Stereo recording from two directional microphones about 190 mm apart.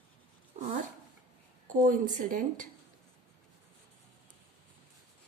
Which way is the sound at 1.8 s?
45° right (ahead or behind).